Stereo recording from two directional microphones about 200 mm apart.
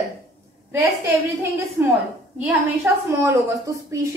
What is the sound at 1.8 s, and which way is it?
A woman's voice, 10° right (ahead or behind).